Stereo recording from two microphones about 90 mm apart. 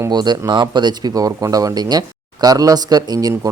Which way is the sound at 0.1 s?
50° right (ahead or behind).